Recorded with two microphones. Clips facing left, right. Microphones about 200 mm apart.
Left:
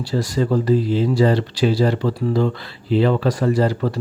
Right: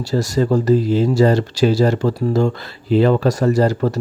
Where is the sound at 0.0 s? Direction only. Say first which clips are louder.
Right 3 dB; 45° right (ahead or behind).